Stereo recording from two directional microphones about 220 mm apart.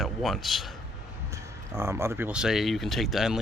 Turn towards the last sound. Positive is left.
turn(degrees=0)  # may be behind; listen again after turning